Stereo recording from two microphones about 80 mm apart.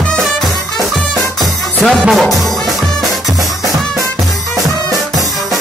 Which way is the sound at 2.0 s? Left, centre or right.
Centre.